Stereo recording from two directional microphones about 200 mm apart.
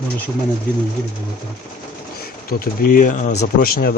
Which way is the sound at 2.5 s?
45° left (ahead or behind).